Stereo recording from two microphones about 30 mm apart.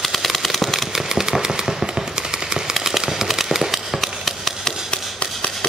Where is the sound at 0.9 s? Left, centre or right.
Centre.